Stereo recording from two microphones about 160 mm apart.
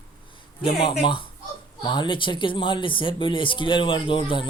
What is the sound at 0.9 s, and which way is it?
Speech, 30° left (ahead or behind).